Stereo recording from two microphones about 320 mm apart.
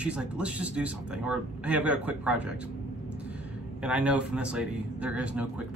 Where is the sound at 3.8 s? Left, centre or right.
Centre.